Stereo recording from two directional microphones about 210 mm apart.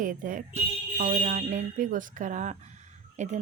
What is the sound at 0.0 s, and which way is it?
A woman's voice, 40° right (ahead or behind).